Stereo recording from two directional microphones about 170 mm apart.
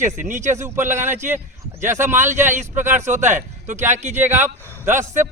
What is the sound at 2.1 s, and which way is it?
Speech, 45° right (ahead or behind).